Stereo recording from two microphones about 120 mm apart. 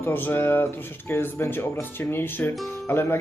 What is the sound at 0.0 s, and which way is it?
Speech, 15° left (ahead or behind).